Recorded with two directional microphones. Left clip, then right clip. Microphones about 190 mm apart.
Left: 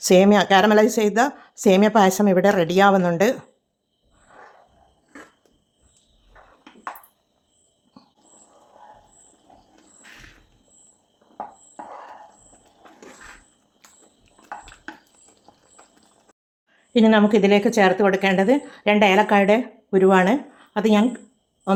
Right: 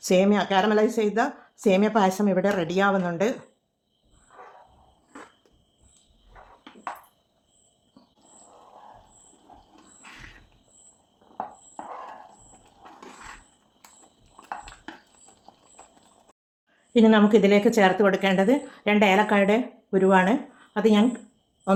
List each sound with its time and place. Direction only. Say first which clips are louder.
0.0 s a woman's voice: left 6 dB; 35° left (ahead or behind)
8.0 s wild animals: left 6 dB; 45° left (ahead or behind)
13.8 s walk: left 1 dB; 5° right (ahead or behind)
16.9 s a woman's voice: left 2 dB; 25° left (ahead or behind)